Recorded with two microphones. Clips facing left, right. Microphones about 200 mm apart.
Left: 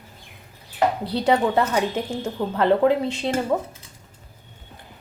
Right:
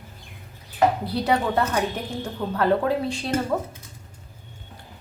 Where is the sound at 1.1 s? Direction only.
25° left (ahead or behind).